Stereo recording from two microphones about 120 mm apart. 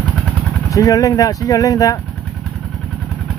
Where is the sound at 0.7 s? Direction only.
30° left (ahead or behind).